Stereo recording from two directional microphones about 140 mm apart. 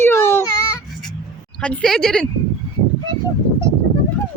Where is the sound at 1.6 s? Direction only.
5° left (ahead or behind).